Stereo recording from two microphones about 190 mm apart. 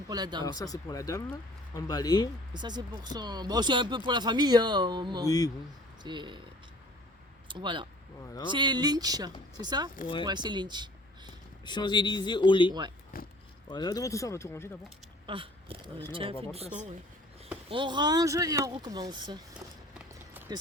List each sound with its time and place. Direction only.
0.1 s speech: 20° right (ahead or behind)
0.4 s speech: 20° left (ahead or behind)
2.5 s speech: 25° right (ahead or behind)
7.4 s speech: 25° right (ahead or behind)
11.6 s speech: 25° left (ahead or behind)
13.1 s a sound: 50° left (ahead or behind)
13.7 s speech: 20° left (ahead or behind)
15.3 s speech: 25° right (ahead or behind)
17.7 s speech: 25° right (ahead or behind)
20.3 s a sound: 10° right (ahead or behind)